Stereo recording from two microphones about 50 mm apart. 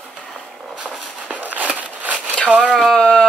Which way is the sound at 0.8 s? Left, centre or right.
Right.